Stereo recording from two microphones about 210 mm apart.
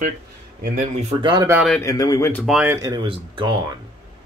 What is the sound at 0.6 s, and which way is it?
Speech, 35° right (ahead or behind).